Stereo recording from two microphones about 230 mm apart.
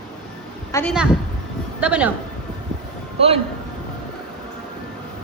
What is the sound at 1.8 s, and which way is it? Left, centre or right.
Speech, centre.